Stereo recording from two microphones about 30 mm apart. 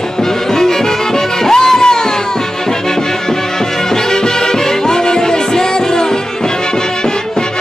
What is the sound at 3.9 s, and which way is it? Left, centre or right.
Music, left.